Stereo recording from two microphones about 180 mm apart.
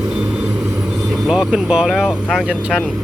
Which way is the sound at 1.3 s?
5° right (ahead or behind).